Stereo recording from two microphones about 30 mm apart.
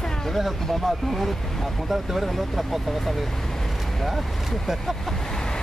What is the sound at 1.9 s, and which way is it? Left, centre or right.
Speech, centre.